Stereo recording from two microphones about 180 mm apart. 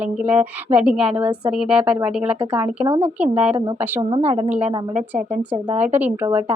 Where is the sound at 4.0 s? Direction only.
30° right (ahead or behind).